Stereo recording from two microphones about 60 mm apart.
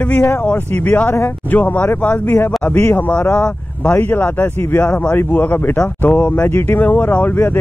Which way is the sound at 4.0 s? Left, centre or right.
Left.